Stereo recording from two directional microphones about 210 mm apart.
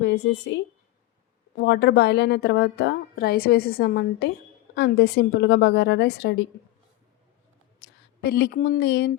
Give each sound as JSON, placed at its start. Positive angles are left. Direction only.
{"t": 0.0, "sound": "a woman's voice", "side_deg": 55}
{"t": 8.2, "sound": "a woman's voice", "side_deg": 50}